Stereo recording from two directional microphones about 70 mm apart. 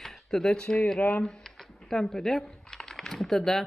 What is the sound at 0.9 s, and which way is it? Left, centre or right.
Speech, left.